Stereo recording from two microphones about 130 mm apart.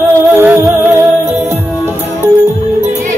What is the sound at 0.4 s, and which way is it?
Music, 15° right (ahead or behind).